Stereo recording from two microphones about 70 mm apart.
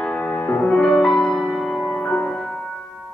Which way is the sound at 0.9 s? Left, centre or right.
Centre.